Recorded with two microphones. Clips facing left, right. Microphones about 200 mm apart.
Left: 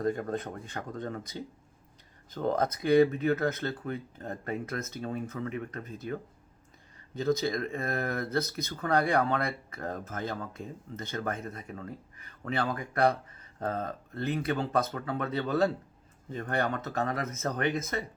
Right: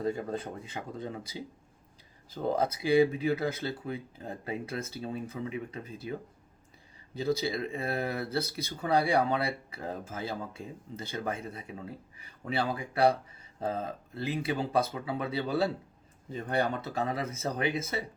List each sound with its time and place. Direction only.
0.0 s speech: 5° right (ahead or behind)
4.6 s speech: 30° right (ahead or behind)
5.2 s speech: 10° right (ahead or behind)
7.6 s speech: 10° right (ahead or behind)